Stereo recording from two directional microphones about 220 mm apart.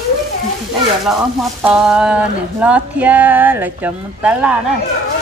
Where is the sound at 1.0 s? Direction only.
Centre (ahead or behind).